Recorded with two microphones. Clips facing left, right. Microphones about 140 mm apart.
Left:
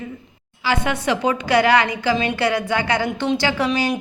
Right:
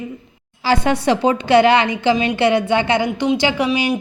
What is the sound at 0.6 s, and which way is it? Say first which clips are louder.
A woman's voice: right 5 dB; 35° right (ahead or behind).